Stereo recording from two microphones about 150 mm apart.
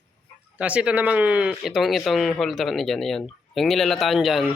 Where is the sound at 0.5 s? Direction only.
10° right (ahead or behind).